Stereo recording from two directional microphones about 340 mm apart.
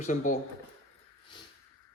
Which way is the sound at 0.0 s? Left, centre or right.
Left.